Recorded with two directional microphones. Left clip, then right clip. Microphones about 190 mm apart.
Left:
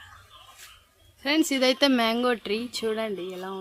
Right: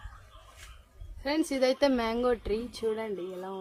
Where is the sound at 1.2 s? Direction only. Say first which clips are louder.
Left 5 dB; 35° left (ahead or behind).